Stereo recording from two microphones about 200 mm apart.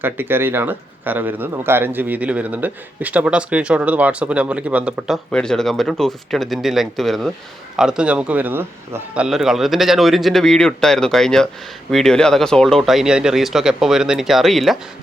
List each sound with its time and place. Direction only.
0.0 s a man's voice: 10° right (ahead or behind)